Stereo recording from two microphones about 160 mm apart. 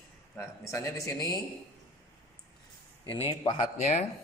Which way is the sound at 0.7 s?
20° left (ahead or behind).